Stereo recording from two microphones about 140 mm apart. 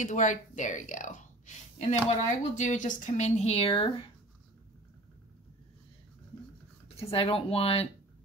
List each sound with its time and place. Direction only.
0.0 s a woman's voice: 65° left (ahead or behind); by 3.9 s 40° left (ahead or behind)
7.0 s speech: 45° left (ahead or behind)